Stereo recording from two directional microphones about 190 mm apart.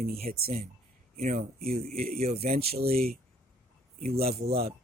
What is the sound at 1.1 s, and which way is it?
Speech, 40° right (ahead or behind).